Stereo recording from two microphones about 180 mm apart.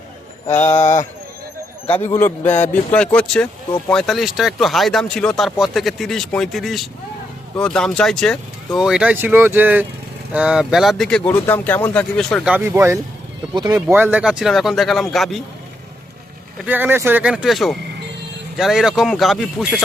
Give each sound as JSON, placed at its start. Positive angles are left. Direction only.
{"t": 0.4, "sound": "mantra", "side_deg": 35}
{"t": 1.9, "sound": "a man's voice", "side_deg": 10}
{"t": 12.5, "sound": "speech", "side_deg": -10}
{"t": 13.8, "sound": "speech", "side_deg": -10}
{"t": 16.6, "sound": "speech", "side_deg": -10}